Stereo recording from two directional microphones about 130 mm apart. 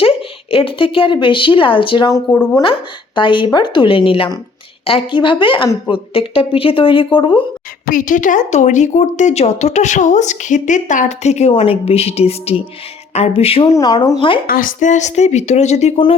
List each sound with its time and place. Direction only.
0.0 s a woman's voice: 45° left (ahead or behind)
2.3 s speech: 10° left (ahead or behind)
3.2 s a woman's voice: 40° left (ahead or behind)
7.9 s speech: 90° left; by 11.5 s 60° left (ahead or behind)
11.5 s speech: 50° left (ahead or behind)
13.7 s a woman's voice: 30° left (ahead or behind)
14.4 s speech: 90° left; by 16.0 s 60° left (ahead or behind)